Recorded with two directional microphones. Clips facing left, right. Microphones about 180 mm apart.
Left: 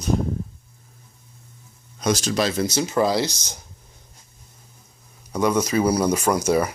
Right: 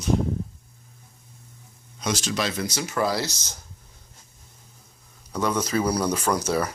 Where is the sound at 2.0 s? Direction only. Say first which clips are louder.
Left 5 dB; 40° left (ahead or behind).